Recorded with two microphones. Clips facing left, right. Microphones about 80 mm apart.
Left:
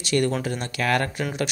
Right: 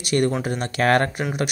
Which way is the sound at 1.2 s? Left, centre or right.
Centre.